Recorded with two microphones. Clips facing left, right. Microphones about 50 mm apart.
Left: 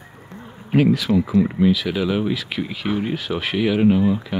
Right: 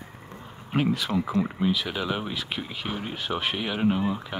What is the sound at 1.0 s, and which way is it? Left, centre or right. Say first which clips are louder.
Speech: left 8 dB; centre.